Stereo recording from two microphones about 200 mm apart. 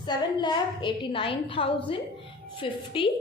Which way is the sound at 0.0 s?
20° left (ahead or behind).